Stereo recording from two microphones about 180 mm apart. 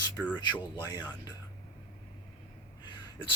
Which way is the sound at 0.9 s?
20° left (ahead or behind).